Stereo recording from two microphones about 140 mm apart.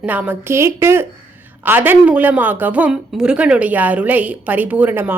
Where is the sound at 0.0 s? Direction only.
10° right (ahead or behind).